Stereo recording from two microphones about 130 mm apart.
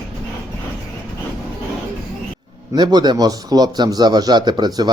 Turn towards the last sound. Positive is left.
turn(degrees=-30)  # may be behind; listen again after turning